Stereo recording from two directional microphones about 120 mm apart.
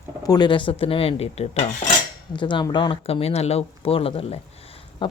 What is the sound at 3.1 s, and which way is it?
Speech, 55° left (ahead or behind).